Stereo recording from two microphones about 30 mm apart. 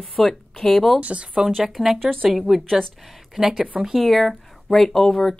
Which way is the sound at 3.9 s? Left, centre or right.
Centre.